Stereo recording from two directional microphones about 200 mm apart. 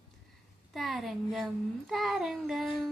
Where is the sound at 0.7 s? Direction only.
Centre (ahead or behind).